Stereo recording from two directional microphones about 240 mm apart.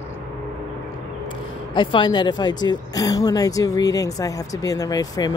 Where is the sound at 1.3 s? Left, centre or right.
Centre.